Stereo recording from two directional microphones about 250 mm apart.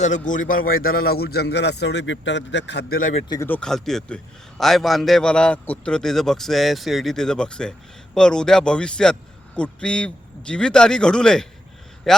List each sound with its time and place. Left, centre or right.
0.3 s speech: left
3.2 s a man's voice: centre